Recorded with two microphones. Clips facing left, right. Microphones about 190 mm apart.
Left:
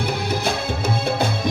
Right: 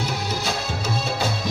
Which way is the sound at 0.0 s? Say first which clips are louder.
Left 4 dB; 55° left (ahead or behind).